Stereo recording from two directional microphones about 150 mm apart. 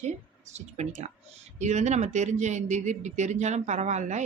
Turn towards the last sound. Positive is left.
turn(degrees=-50)  # may be behind; listen again after turning